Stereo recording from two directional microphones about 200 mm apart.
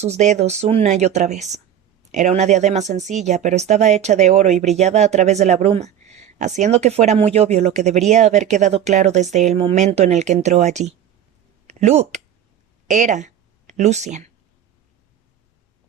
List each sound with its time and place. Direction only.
0.0 s speech: 35° right (ahead or behind)